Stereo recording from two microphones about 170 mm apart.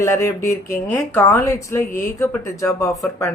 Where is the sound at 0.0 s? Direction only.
20° left (ahead or behind).